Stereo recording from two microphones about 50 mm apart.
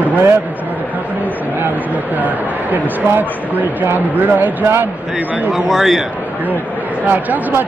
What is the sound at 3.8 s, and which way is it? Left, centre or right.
Speech, right.